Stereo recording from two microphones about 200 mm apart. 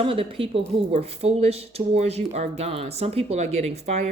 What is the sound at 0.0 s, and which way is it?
Speech, 30° right (ahead or behind).